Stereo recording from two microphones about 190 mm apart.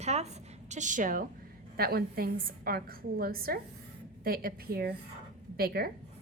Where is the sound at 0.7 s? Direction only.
40° right (ahead or behind).